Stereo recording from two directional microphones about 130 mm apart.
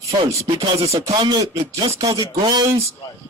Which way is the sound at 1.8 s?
30° right (ahead or behind).